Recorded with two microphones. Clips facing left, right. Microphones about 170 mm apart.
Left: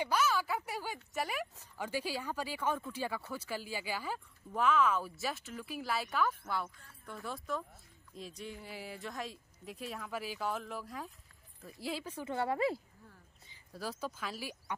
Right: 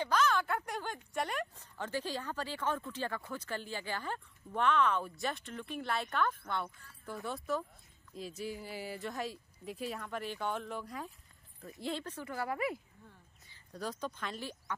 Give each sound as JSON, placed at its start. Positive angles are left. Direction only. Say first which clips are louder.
{"t": 0.0, "sound": "speech", "louder": "right 1 dB", "side_deg": 10}
{"t": 12.3, "sound": "speech", "louder": "left 4 dB", "side_deg": 25}
{"t": 13.7, "sound": "speech", "louder": "right 1 dB", "side_deg": 5}